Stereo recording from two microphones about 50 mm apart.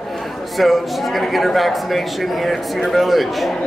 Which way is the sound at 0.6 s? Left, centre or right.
Centre.